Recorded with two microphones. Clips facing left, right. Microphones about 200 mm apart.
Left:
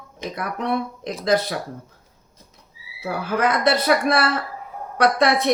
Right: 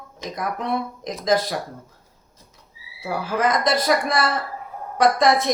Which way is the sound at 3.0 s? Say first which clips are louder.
Left 1 dB; 65° left (ahead or behind).